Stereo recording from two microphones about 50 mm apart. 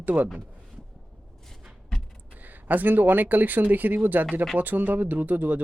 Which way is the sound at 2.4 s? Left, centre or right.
Right.